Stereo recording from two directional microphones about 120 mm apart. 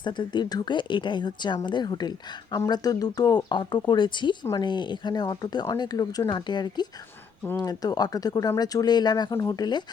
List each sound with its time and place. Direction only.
0.0 s speech: 40° left (ahead or behind)